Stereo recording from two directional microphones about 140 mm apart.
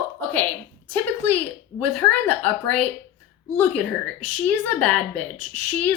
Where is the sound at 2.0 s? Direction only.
10° left (ahead or behind).